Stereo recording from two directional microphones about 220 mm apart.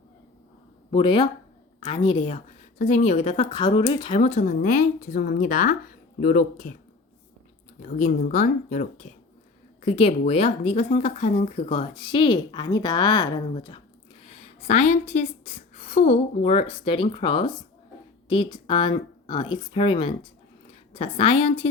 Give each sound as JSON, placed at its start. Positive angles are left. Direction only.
{"t": 0.9, "sound": "speech", "side_deg": 25}
{"t": 7.8, "sound": "speech", "side_deg": 35}